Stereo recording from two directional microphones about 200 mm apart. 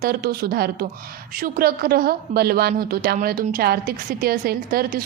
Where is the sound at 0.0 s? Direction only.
50° right (ahead or behind).